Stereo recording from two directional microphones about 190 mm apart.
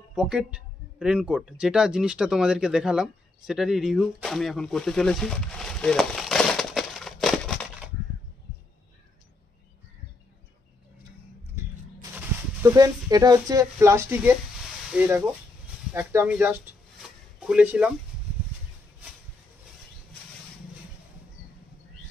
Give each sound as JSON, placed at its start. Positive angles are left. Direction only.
{"t": 0.1, "sound": "speech", "side_deg": -5}
{"t": 11.5, "sound": "a sound", "side_deg": -15}
{"t": 14.9, "sound": "speech", "side_deg": -10}